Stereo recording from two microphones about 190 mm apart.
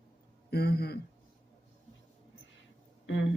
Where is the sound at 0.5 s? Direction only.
55° left (ahead or behind).